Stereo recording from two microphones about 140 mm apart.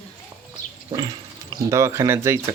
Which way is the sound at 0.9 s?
30° right (ahead or behind).